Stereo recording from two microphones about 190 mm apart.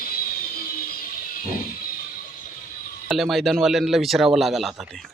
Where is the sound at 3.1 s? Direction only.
Centre (ahead or behind).